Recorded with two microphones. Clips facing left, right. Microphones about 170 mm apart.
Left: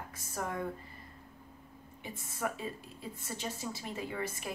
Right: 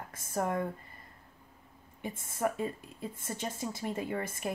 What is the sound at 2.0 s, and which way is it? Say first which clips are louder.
A woman's voice: right 5 dB; 50° right (ahead or behind).